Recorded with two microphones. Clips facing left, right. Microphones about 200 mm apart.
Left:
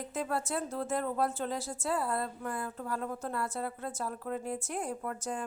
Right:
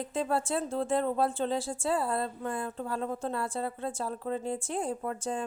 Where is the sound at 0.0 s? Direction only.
30° right (ahead or behind).